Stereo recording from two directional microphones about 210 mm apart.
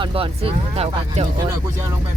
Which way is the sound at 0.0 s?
25° right (ahead or behind).